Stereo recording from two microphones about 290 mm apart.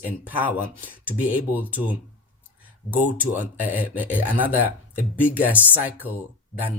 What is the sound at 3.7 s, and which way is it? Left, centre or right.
Speech, centre.